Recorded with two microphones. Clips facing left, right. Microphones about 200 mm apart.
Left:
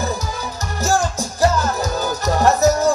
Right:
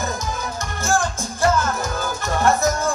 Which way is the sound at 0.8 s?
40° left (ahead or behind).